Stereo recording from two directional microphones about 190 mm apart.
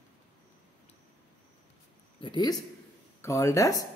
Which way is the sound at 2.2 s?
20° left (ahead or behind).